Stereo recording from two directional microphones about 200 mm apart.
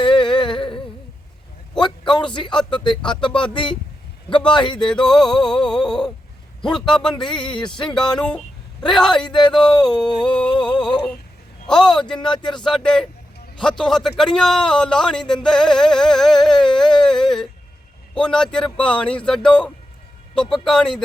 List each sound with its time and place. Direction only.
0.0 s humming: 25° left (ahead or behind)
1.8 s speech: 20° left (ahead or behind)
3.1 s music: 25° left (ahead or behind)
5.0 s a man's voice: 5° left (ahead or behind)
12.2 s music: 25° left (ahead or behind)
12.6 s a man's voice: 5° left (ahead or behind)